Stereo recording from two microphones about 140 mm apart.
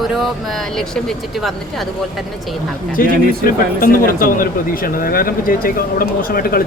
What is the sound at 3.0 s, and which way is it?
Speech, 90° left.